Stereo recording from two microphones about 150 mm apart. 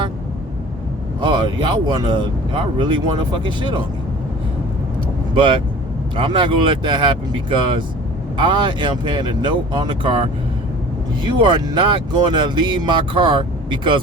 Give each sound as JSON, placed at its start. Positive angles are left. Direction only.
{"t": 1.2, "sound": "speech", "side_deg": -30}
{"t": 6.1, "sound": "speech", "side_deg": -35}